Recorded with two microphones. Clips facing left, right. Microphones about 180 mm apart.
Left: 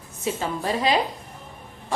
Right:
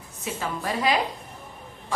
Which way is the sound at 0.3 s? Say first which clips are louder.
Even; 30° left (ahead or behind).